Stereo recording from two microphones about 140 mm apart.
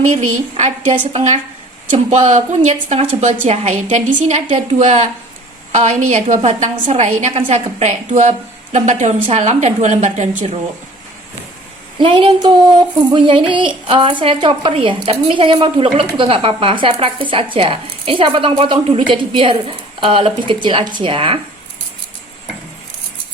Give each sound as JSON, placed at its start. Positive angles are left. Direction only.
{"t": 0.2, "sound": "a woman's voice", "side_deg": -55}
{"t": 12.0, "sound": "speech", "side_deg": -35}